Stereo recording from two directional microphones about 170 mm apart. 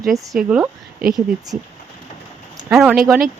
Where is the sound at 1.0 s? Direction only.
65° right (ahead or behind).